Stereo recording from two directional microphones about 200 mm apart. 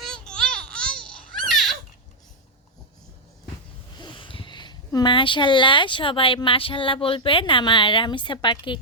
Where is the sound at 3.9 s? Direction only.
25° left (ahead or behind).